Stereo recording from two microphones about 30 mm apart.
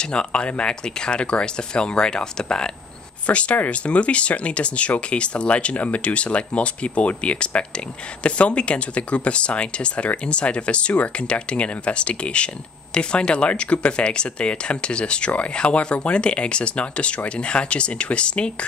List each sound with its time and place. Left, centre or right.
0.0 s speech: left
3.3 s speech: left
5.8 s speech: left
6.0 s speech: left